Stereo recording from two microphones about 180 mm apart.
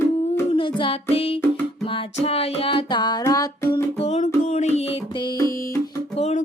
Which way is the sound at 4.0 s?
35° left (ahead or behind).